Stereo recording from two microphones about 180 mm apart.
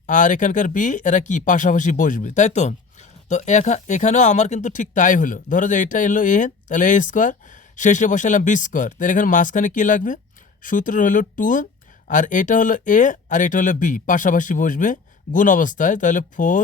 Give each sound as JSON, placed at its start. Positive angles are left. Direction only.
{"t": 0.1, "sound": "speech", "side_deg": 45}